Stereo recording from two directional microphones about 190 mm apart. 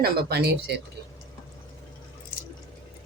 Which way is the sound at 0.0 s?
55° right (ahead or behind).